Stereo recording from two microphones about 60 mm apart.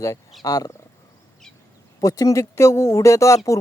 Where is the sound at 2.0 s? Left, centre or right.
Left.